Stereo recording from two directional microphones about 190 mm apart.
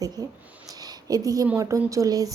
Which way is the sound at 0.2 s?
20° right (ahead or behind).